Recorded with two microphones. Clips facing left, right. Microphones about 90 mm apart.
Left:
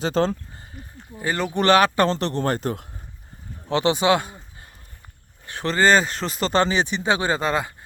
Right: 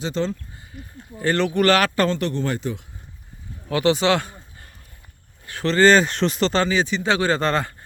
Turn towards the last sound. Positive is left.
turn(degrees=10)  # may be behind; listen again after turning